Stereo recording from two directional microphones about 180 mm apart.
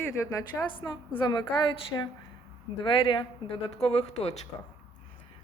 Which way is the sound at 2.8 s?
30° left (ahead or behind).